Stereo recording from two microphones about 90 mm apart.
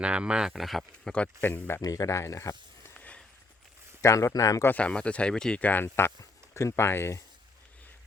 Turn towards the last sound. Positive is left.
turn(degrees=30)  # may be behind; listen again after turning